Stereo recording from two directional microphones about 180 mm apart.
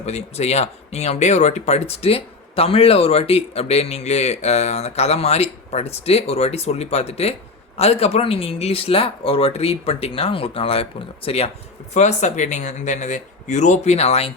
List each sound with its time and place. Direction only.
0.0 s speech: 35° left (ahead or behind)